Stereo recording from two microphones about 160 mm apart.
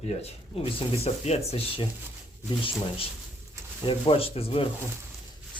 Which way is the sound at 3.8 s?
35° left (ahead or behind).